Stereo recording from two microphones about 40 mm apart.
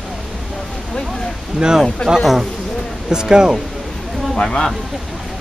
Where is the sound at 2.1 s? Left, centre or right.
Centre.